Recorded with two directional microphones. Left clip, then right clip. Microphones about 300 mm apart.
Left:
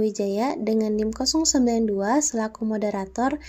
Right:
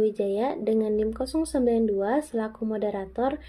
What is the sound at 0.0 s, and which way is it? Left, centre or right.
Speech, left.